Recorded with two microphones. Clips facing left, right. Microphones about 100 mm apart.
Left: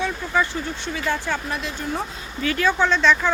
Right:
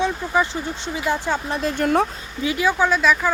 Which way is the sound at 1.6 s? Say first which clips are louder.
Right 9 dB; 55° right (ahead or behind).